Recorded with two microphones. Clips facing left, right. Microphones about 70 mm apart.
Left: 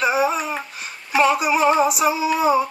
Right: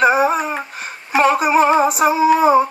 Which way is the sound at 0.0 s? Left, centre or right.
Right.